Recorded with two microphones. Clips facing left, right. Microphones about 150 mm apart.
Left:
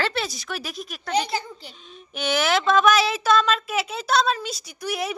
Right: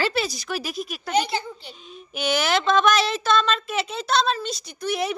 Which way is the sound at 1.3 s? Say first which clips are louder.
Right 1 dB; 40° left (ahead or behind).